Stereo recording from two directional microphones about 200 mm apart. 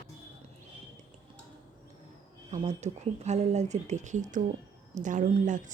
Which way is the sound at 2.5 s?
35° right (ahead or behind).